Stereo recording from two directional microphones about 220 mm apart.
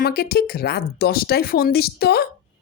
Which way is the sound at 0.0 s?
45° left (ahead or behind).